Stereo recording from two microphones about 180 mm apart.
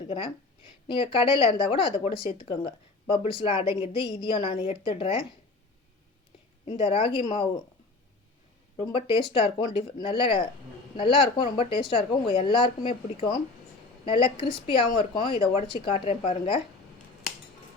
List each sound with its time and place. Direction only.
0.1 s speech: 30° left (ahead or behind)
6.7 s a woman's voice: 30° left (ahead or behind)
8.8 s a woman's voice: 30° left (ahead or behind)